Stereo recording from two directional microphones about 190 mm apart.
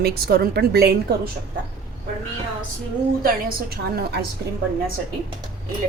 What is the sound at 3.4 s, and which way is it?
Speech, 55° right (ahead or behind).